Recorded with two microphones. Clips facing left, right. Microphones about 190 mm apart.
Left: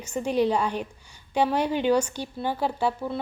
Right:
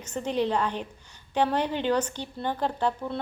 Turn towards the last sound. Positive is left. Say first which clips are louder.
# left 1 dB
turn(degrees=10)  # may be behind; listen again after turning